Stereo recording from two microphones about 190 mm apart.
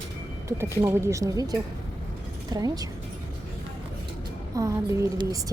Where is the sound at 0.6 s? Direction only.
15° right (ahead or behind).